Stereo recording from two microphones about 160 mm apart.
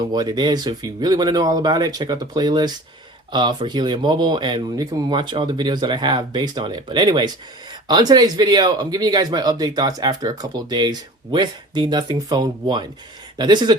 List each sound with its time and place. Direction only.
0.0 s speech: 25° right (ahead or behind)